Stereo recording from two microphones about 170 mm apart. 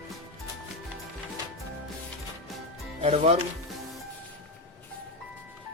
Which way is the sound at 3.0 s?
40° right (ahead or behind).